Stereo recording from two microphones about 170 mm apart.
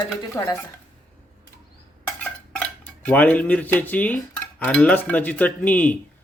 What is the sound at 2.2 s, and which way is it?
Dishes, 5° left (ahead or behind).